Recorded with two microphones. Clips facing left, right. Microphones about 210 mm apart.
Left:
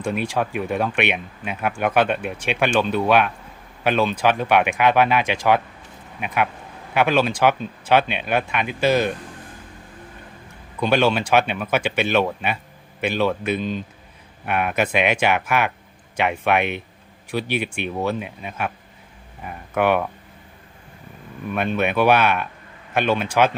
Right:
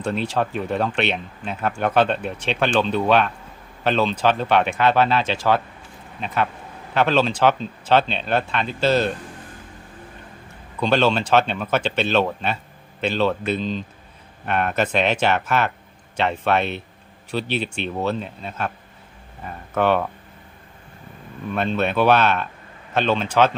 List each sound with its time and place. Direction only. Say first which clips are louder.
0.0 s speech: even; 10° left (ahead or behind)
10.8 s speech: even; 10° left (ahead or behind)
21.5 s speech: even; 10° left (ahead or behind)